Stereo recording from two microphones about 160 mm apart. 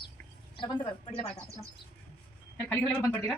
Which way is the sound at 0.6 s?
35° left (ahead or behind).